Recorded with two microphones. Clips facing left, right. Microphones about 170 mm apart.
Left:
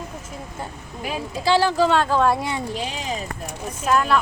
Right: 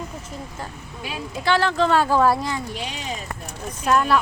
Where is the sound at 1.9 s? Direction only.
5° right (ahead or behind).